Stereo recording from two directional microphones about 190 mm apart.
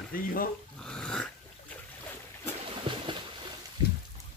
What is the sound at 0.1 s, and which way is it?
Speech, 50° left (ahead or behind).